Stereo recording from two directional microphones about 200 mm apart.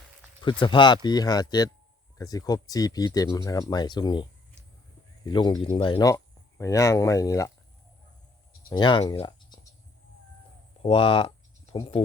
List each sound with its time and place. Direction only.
0.4 s speech: 25° left (ahead or behind)
8.7 s speech: 20° left (ahead or behind)
10.8 s speech: 25° left (ahead or behind)